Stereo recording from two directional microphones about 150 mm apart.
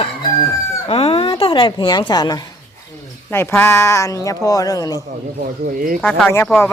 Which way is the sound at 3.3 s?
15° left (ahead or behind).